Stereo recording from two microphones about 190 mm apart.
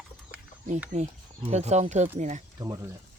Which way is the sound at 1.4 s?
35° right (ahead or behind).